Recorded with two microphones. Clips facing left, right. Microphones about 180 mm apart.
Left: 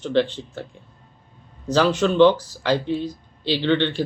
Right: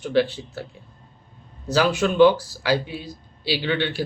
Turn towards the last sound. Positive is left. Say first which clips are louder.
# left 4 dB
turn(degrees=-10)  # may be behind; listen again after turning